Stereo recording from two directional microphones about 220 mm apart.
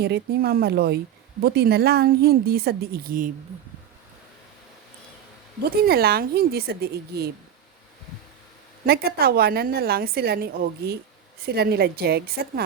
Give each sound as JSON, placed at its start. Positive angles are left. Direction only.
{"t": 0.0, "sound": "a woman's voice", "side_deg": -45}
{"t": 5.6, "sound": "a woman's voice", "side_deg": -45}
{"t": 8.9, "sound": "a woman's voice", "side_deg": -45}